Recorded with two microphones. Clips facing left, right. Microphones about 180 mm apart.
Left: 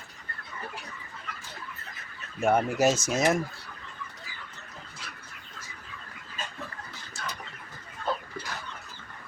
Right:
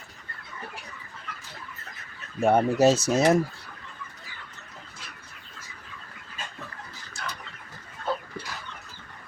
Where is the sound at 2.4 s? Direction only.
30° right (ahead or behind).